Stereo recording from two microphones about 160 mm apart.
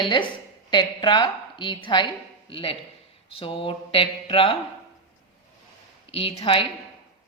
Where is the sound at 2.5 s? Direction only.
35° left (ahead or behind).